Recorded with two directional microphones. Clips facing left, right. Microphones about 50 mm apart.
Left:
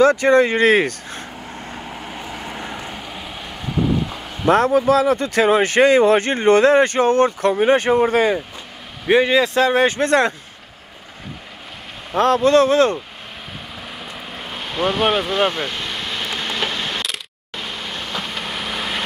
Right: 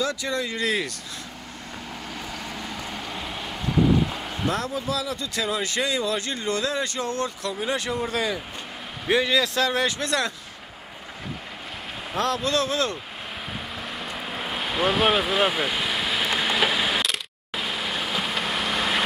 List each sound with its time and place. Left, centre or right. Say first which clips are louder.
0.0 s speech: left 14 dB; left
1.9 s vehicle: left 4 dB; left
3.0 s vehicle: left 1 dB; centre
4.5 s speech: left 14 dB; left
12.2 s speech: left 10 dB; left
13.9 s vehicle: right 2 dB; centre